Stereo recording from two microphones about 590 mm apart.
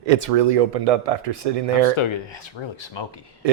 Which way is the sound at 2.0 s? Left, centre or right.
Left.